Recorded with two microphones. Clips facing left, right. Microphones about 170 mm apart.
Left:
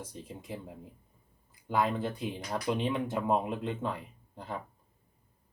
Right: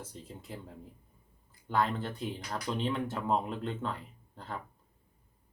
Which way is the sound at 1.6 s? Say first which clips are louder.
Left 1 dB; 10° left (ahead or behind).